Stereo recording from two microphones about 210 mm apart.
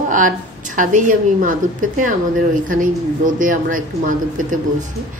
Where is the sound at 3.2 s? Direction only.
40° right (ahead or behind).